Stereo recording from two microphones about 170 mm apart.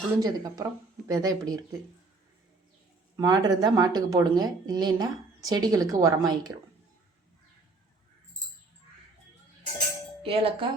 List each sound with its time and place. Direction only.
0.2 s a woman's voice: 20° right (ahead or behind)
3.2 s a woman's voice: 25° right (ahead or behind)
10.2 s speech: 35° right (ahead or behind)